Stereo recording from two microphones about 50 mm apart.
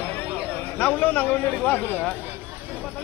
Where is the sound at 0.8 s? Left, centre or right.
Left.